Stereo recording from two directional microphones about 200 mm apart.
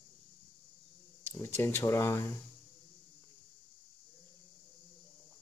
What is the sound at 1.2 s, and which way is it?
Speech, 10° left (ahead or behind).